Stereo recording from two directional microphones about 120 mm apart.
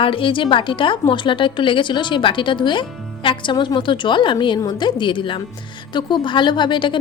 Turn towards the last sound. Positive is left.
turn(degrees=40)  # may be behind; listen again after turning